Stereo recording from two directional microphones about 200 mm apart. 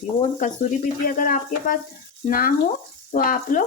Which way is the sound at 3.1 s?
45° left (ahead or behind).